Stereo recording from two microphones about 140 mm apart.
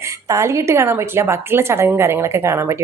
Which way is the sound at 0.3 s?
20° right (ahead or behind).